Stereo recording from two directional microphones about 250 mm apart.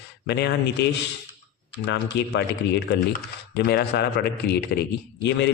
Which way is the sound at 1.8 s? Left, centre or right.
Left.